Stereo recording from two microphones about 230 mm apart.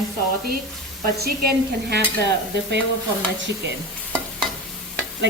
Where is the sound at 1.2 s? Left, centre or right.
Right.